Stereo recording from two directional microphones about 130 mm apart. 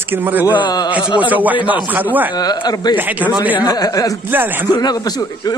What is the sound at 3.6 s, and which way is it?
Speech, 30° left (ahead or behind).